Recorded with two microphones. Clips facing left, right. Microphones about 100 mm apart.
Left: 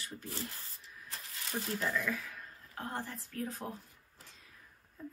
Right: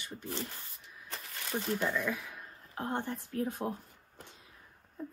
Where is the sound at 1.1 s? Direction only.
90° right.